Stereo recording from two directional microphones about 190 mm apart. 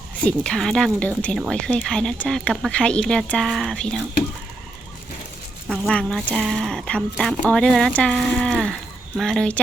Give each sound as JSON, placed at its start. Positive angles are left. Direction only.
{"t": 0.3, "sound": "speech", "side_deg": 5}
{"t": 5.8, "sound": "speech", "side_deg": 5}